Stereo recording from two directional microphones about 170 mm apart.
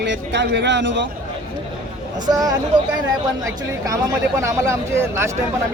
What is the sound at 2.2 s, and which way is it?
Speech, 20° right (ahead or behind).